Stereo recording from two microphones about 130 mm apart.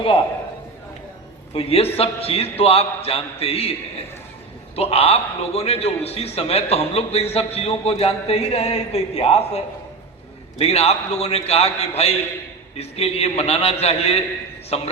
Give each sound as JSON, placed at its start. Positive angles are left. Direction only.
{"t": 1.5, "sound": "a man's voice", "side_deg": 50}
{"t": 10.6, "sound": "a man's voice", "side_deg": 50}